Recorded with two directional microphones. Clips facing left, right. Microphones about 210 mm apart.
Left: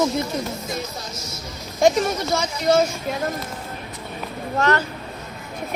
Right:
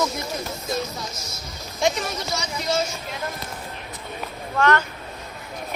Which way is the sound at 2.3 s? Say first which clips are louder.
Left 7 dB; 60° left (ahead or behind).